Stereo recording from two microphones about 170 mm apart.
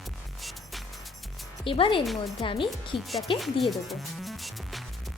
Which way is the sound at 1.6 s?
30° left (ahead or behind).